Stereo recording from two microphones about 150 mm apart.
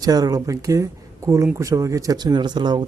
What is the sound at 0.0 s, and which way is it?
Speech, 25° right (ahead or behind).